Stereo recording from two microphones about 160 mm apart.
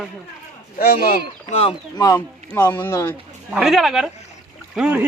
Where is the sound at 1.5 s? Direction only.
40° left (ahead or behind).